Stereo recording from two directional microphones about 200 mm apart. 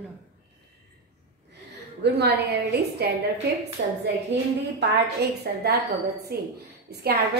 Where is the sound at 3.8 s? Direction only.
60° right (ahead or behind).